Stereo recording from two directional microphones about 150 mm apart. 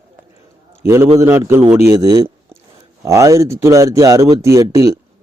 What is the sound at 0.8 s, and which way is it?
Speech, 15° right (ahead or behind).